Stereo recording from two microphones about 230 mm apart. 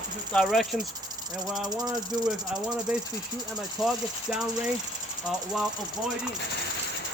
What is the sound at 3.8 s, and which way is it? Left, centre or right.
Speech, centre.